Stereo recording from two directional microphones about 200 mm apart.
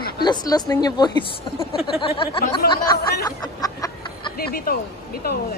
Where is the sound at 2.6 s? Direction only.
50° left (ahead or behind).